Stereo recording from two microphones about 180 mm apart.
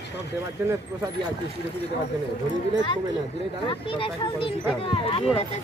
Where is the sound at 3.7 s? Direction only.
30° left (ahead or behind).